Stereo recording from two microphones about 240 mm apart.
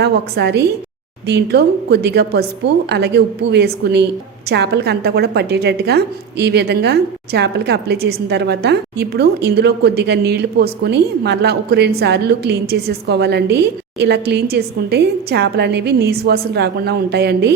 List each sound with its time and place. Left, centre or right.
0.0 s a woman's voice: right